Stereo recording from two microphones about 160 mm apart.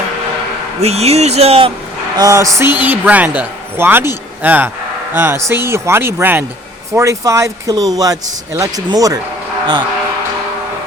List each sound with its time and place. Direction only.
0.8 s speech: 40° right (ahead or behind)
2.1 s a man's voice: 20° right (ahead or behind)